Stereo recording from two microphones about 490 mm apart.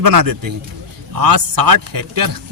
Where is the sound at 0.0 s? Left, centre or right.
Right.